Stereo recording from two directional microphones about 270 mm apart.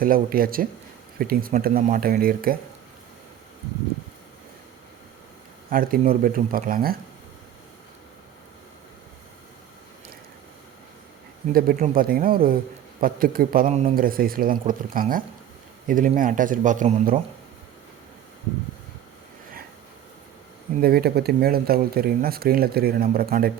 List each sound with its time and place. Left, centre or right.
0.0 s speech: right
5.7 s speech: right
11.5 s speech: right
20.8 s speech: right